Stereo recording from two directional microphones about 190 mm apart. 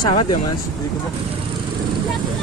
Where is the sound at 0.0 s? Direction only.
25° left (ahead or behind).